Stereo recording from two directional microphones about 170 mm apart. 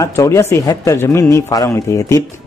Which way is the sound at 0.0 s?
15° left (ahead or behind).